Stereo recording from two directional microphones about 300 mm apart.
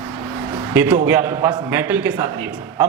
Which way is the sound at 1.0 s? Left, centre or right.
Centre.